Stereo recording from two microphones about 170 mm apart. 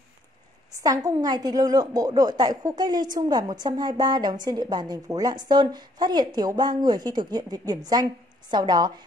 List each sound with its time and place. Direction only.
0.7 s a woman's voice: 20° right (ahead or behind)